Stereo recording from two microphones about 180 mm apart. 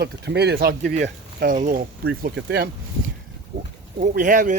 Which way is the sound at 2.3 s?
70° right (ahead or behind).